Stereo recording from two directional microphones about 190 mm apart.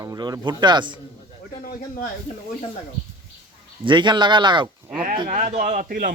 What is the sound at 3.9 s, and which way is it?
A man's voice, 25° right (ahead or behind).